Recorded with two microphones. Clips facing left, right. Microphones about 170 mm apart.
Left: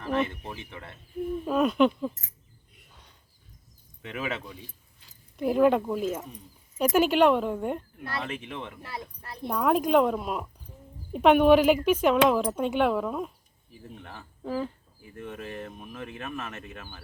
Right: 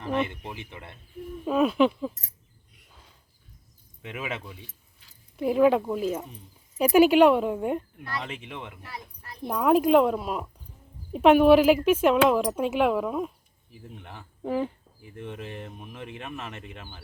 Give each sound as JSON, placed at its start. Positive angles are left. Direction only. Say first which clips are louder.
{"t": 0.0, "sound": "speech", "louder": "even", "side_deg": -15}
{"t": 1.5, "sound": "speech", "louder": "right 1 dB", "side_deg": 0}
{"t": 4.0, "sound": "speech", "louder": "left 1 dB", "side_deg": -15}
{"t": 5.4, "sound": "speech", "louder": "right 1 dB", "side_deg": 0}
{"t": 13.9, "sound": "speech", "louder": "even", "side_deg": -15}